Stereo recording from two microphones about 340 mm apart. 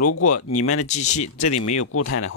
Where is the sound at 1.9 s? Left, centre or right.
Left.